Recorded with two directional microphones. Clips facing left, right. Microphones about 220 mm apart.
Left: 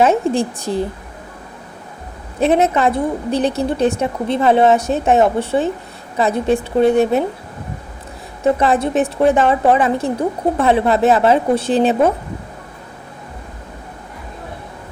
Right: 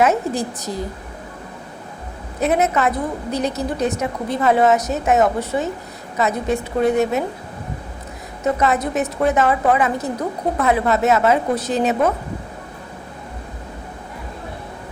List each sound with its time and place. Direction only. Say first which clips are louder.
0.0 s a woman's voice: left 4 dB; 30° left (ahead or behind)
2.4 s a woman's voice: left 4 dB; 30° left (ahead or behind)
8.4 s a woman's voice: left 4 dB; 30° left (ahead or behind)